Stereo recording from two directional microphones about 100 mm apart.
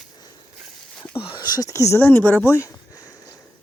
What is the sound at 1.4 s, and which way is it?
Speech, 45° left (ahead or behind).